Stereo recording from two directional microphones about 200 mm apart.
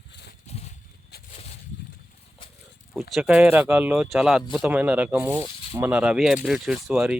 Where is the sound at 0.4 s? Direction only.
30° left (ahead or behind).